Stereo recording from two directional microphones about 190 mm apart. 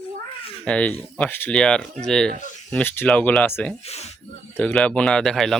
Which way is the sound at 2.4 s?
40° left (ahead or behind).